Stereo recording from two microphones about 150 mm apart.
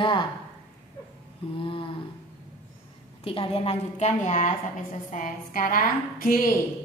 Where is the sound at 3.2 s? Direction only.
40° left (ahead or behind); by 6.5 s 70° left (ahead or behind).